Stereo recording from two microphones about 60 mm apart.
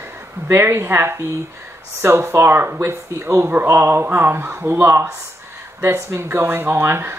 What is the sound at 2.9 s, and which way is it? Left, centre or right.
Speech, right.